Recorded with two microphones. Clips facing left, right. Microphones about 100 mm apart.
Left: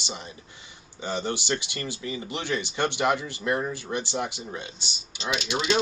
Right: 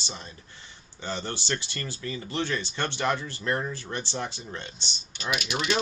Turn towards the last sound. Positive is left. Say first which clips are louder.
# left 2 dB
turn(degrees=20)  # may be behind; listen again after turning